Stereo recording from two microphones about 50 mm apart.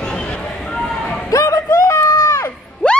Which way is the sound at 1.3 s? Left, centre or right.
Left.